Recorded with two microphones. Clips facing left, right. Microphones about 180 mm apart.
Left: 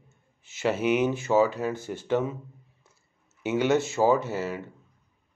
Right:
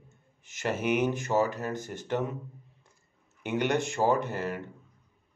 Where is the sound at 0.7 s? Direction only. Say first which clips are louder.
Left 2 dB; 50° right (ahead or behind).